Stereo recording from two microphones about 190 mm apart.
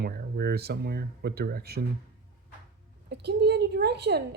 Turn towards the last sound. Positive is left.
turn(degrees=-60)  # may be behind; listen again after turning